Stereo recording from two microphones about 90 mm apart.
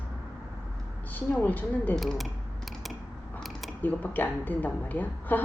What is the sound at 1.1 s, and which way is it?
Speech, 20° left (ahead or behind).